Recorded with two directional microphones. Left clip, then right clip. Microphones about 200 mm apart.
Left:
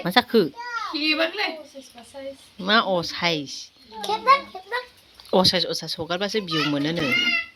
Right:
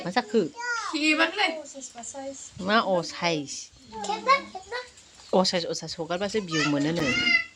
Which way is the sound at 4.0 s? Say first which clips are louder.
Left 5 dB; 35° left (ahead or behind).